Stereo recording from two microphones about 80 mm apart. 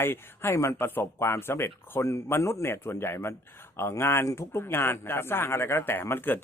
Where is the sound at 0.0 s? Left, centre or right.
Left.